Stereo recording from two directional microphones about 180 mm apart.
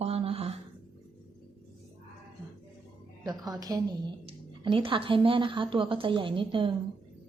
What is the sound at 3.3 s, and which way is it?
A woman's voice, 20° right (ahead or behind).